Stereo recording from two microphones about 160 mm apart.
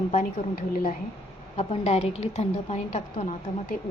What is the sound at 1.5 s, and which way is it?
A woman's voice, 40° left (ahead or behind).